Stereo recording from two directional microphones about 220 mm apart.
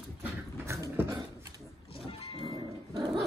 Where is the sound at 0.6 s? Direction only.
15° right (ahead or behind).